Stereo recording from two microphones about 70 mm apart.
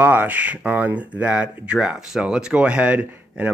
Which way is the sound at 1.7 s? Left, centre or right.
Centre.